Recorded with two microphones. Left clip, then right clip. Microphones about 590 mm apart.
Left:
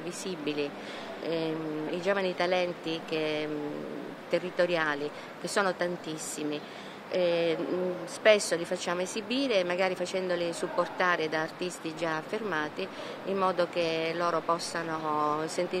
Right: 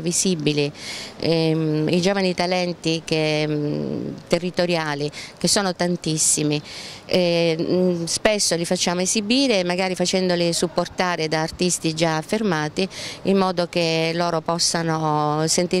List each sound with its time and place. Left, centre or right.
0.1 s speech: right